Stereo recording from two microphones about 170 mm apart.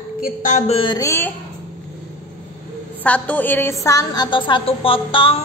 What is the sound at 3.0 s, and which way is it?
Speech, 10° left (ahead or behind).